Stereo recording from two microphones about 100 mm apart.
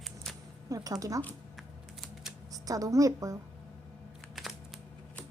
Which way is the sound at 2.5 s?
35° right (ahead or behind).